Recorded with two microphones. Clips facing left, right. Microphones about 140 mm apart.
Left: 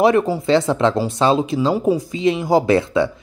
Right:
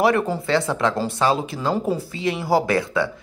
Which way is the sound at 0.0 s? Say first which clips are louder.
Left 4 dB; 20° left (ahead or behind).